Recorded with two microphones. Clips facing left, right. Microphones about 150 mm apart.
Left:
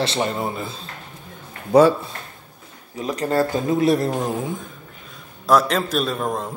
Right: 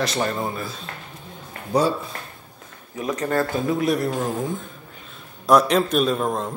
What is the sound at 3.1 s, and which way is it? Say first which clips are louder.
Speech: left 3 dB; 35° left (ahead or behind).